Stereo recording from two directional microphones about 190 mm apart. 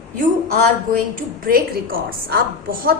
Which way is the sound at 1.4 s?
50° right (ahead or behind).